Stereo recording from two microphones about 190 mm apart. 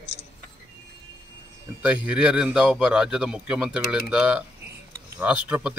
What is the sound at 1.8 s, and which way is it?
A man's voice, 5° right (ahead or behind).